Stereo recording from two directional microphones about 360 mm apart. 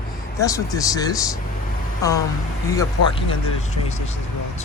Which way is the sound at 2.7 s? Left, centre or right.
Centre.